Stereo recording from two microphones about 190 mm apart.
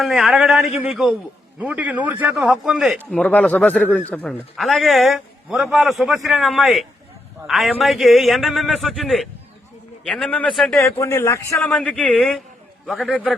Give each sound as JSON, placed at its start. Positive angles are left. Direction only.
{"t": 0.0, "sound": "a man's voice", "side_deg": 0}
{"t": 10.8, "sound": "speech", "side_deg": 15}
{"t": 11.6, "sound": "a man's voice", "side_deg": 5}